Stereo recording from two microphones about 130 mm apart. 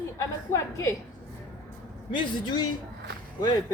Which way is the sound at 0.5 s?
25° left (ahead or behind).